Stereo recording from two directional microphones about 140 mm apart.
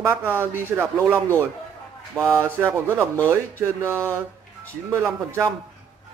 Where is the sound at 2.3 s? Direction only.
20° right (ahead or behind).